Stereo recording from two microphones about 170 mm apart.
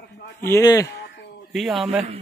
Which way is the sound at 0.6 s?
20° left (ahead or behind).